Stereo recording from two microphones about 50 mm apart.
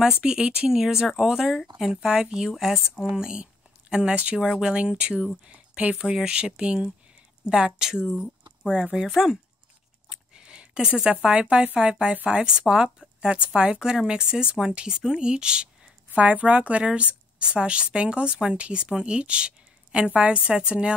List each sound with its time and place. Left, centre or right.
0.2 s speech: centre
3.2 s a woman's voice: centre
10.0 s a sound: centre
11.7 s a woman's voice: centre
16.1 s a woman's voice: right